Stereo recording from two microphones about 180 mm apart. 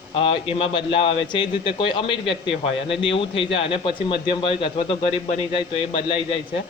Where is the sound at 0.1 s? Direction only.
30° left (ahead or behind).